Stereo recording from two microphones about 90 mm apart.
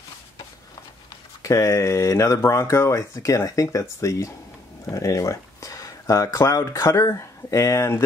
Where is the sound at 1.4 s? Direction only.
35° left (ahead or behind).